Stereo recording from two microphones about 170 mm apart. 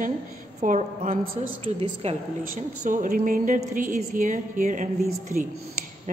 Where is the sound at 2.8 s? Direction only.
50° right (ahead or behind).